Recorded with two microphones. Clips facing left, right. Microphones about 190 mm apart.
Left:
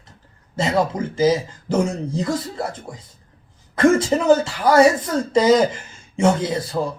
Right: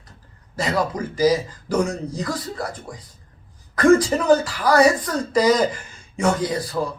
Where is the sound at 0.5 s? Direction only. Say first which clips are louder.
Left 3 dB; 25° left (ahead or behind).